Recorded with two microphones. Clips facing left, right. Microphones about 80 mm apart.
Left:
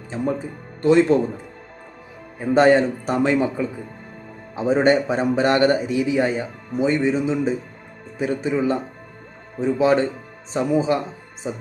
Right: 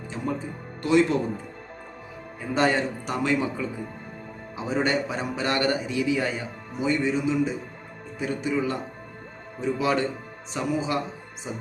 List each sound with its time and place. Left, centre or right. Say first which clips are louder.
0.8 s a man's voice: left 6 dB; left
2.4 s a man's voice: left 8 dB; left